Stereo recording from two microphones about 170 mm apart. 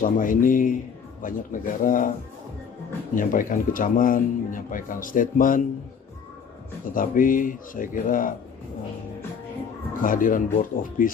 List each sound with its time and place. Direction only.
0.0 s speech: 55° left (ahead or behind)
3.2 s speech: 55° left (ahead or behind)
6.9 s speech: 55° left (ahead or behind)
10.0 s speech: 55° left (ahead or behind)